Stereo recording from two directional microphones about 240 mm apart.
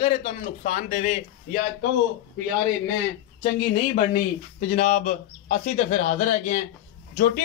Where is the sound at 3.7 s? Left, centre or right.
Left.